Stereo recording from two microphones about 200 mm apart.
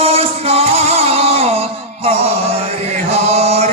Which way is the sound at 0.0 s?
30° right (ahead or behind).